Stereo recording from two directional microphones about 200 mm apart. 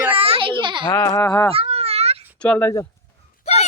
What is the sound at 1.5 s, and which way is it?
Cat, 30° right (ahead or behind).